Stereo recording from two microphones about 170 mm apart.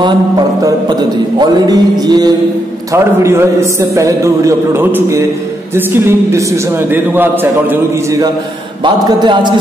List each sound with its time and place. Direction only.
1.4 s mantra: 25° right (ahead or behind)
2.9 s a man's voice: 15° right (ahead or behind)
7.7 s mantra: 20° right (ahead or behind)